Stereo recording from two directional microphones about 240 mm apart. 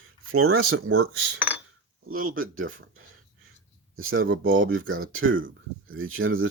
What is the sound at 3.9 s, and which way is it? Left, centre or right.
Speech, right.